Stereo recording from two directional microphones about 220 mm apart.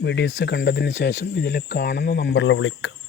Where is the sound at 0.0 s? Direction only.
55° left (ahead or behind).